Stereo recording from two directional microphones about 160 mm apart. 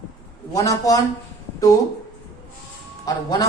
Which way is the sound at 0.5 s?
20° left (ahead or behind).